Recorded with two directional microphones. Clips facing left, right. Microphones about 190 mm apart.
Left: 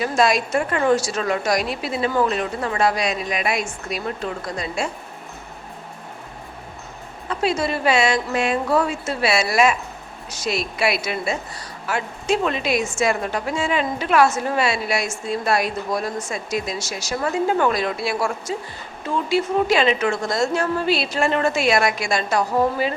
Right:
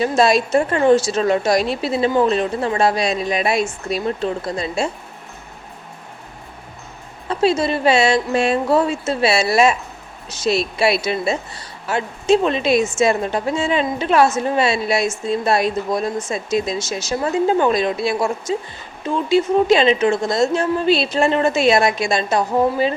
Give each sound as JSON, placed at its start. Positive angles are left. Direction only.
{"t": 0.0, "sound": "a woman's voice", "side_deg": -30}
{"t": 7.3, "sound": "a woman's voice", "side_deg": -25}